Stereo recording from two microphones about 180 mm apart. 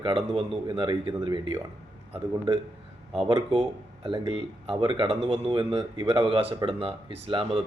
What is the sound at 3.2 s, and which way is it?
A man's voice, 30° right (ahead or behind).